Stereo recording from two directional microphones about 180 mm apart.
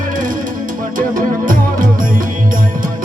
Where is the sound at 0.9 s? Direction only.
50° right (ahead or behind).